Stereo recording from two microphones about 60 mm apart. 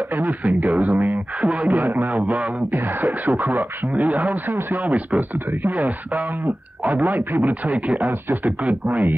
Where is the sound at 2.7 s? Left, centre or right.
Right.